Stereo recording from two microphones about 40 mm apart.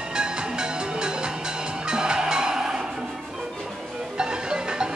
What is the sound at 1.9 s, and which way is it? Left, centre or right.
Music, right.